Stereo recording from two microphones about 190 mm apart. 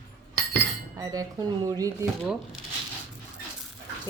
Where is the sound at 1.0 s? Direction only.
20° right (ahead or behind).